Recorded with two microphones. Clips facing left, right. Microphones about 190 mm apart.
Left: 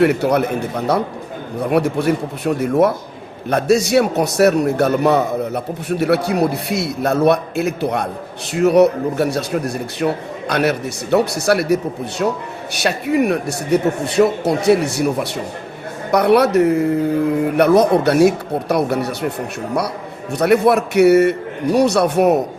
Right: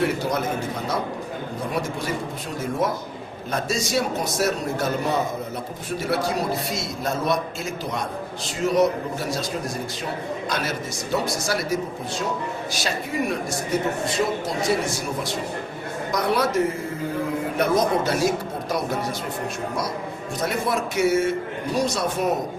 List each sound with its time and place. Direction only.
0.0 s a man's voice: 65° left (ahead or behind)
20.4 s a man's voice: 65° left (ahead or behind)